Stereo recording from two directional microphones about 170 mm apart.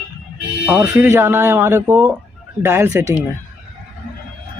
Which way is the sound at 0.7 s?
10° right (ahead or behind).